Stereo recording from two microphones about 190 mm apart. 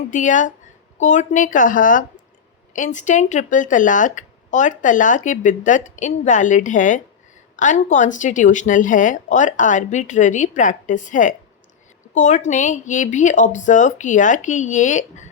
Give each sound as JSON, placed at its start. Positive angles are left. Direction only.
{"t": 0.1, "sound": "speech", "side_deg": 40}